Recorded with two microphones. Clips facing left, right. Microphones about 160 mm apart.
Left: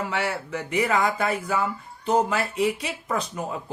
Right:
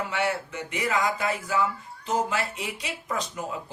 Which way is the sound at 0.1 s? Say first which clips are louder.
Left 1 dB; 60° left (ahead or behind).